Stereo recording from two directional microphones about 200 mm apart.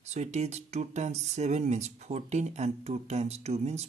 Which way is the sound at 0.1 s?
35° right (ahead or behind).